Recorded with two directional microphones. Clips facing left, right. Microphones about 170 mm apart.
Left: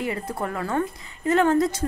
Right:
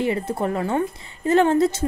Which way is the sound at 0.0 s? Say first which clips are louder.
Right 5 dB; 25° right (ahead or behind).